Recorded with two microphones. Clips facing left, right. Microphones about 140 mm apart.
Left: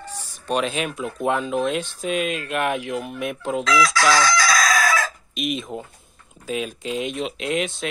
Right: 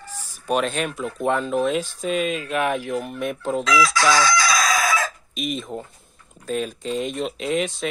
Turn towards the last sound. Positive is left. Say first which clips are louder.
# right 1 dB
turn(degrees=0)  # may be behind; listen again after turning